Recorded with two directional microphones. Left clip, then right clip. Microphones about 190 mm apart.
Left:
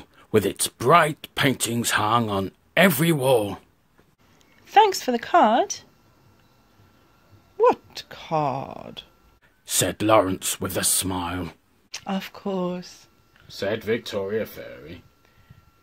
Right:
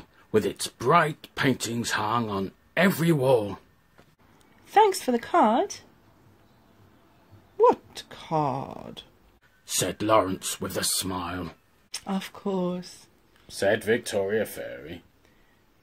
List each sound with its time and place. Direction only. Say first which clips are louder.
0.0 s speech: left 3 dB; 40° left (ahead or behind)
4.6 s a woman's voice: left 3 dB; 10° left (ahead or behind)
7.5 s speech: left 1 dB; 10° left (ahead or behind)
9.7 s speech: left 4 dB; 40° left (ahead or behind)
11.9 s speech: left 3 dB; 10° left (ahead or behind)
13.5 s speech: right 2 dB; 40° left (ahead or behind)